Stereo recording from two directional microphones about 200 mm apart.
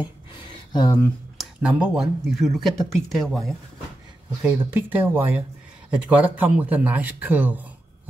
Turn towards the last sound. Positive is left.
turn(degrees=-10)  # may be behind; listen again after turning